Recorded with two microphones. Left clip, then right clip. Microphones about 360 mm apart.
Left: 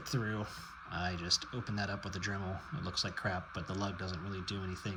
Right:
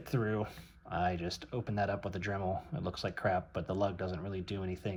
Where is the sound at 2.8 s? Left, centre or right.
Centre.